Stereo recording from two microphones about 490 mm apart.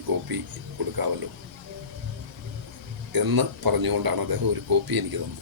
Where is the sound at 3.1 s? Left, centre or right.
Right.